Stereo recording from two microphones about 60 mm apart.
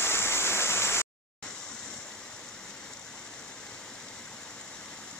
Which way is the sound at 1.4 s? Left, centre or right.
Centre.